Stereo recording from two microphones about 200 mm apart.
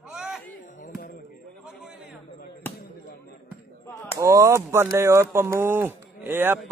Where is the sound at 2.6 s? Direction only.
10° left (ahead or behind).